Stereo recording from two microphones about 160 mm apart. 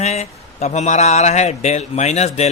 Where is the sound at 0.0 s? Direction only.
45° left (ahead or behind).